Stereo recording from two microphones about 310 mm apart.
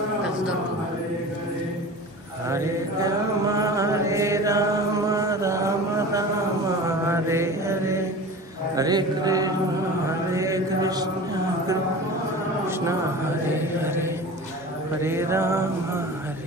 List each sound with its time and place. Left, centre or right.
2.5 s mantra: centre
8.7 s a sound: centre
10.3 s mantra: centre
13.6 s mantra: centre